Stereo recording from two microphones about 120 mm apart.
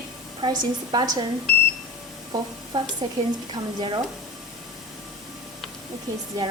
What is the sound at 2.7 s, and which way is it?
A woman's voice, 40° right (ahead or behind).